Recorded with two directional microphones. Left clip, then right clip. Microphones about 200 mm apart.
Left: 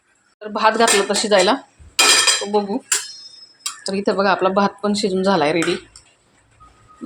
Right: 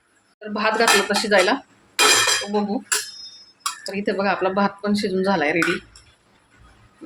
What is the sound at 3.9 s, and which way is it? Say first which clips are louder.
Speech: left 5 dB; 15° left (ahead or behind).